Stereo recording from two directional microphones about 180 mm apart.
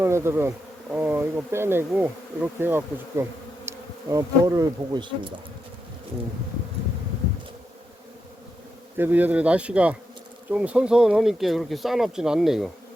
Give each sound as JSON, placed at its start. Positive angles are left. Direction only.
{"t": 0.0, "sound": "bee", "side_deg": -15}
{"t": 9.0, "sound": "bee", "side_deg": -10}
{"t": 10.5, "sound": "speech", "side_deg": -5}